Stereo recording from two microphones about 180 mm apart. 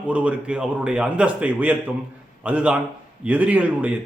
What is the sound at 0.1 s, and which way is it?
Speech, 5° right (ahead or behind).